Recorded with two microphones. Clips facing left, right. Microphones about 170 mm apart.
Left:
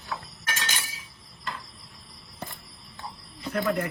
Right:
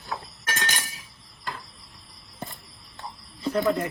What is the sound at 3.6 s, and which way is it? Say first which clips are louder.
Speech: right 2 dB; 20° right (ahead or behind).